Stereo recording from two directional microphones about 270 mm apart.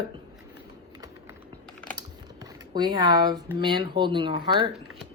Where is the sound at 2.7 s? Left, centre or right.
Centre.